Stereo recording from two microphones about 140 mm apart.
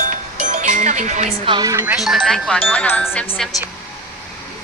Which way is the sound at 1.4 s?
30° right (ahead or behind).